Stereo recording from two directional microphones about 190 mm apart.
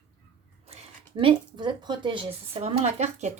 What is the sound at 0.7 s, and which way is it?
A woman's voice, 30° right (ahead or behind).